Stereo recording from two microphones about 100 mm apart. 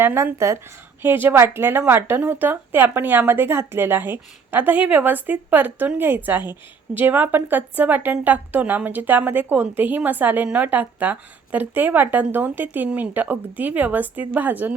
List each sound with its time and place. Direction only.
0.0 s a woman's voice: 25° right (ahead or behind)